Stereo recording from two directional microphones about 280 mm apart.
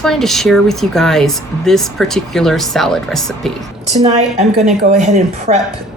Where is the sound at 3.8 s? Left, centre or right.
Right.